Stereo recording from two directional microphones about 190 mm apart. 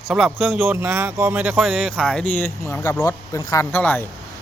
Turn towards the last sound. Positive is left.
turn(degrees=10)  # may be behind; listen again after turning